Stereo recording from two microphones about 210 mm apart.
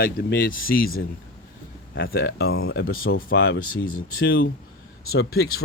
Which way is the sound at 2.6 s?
45° left (ahead or behind).